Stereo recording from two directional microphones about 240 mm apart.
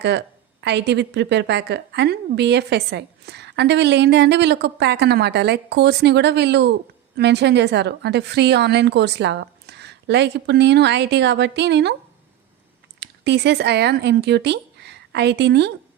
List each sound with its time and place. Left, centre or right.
0.0 s a woman's voice: right
13.0 s speech: right